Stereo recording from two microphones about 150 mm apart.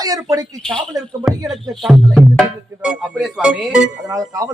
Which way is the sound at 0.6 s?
5° left (ahead or behind).